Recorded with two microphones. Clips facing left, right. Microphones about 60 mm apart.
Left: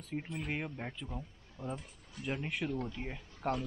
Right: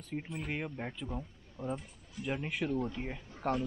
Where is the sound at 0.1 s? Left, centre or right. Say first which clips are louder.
Even; centre.